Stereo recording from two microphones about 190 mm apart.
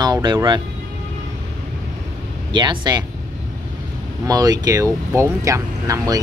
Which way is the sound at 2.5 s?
25° right (ahead or behind).